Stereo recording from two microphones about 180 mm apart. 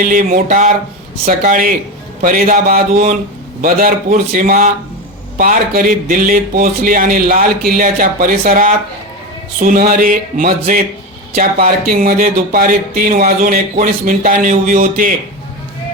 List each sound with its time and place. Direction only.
0.0 s speech: 45° right (ahead or behind)
11.9 s speech: 50° right (ahead or behind)